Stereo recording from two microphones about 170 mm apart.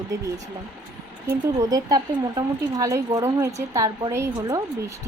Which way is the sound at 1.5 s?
20° right (ahead or behind).